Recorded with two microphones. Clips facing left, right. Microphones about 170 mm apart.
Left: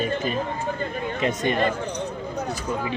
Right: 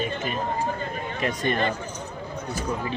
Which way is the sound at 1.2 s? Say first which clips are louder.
Left 2 dB; 25° left (ahead or behind).